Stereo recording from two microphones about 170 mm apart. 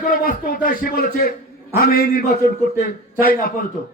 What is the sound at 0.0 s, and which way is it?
A man's voice, 55° left (ahead or behind).